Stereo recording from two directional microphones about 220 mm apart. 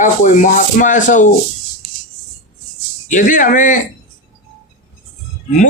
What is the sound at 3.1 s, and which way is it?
Speech, 35° left (ahead or behind).